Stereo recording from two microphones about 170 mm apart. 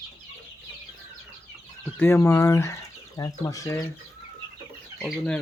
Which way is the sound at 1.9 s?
15° left (ahead or behind).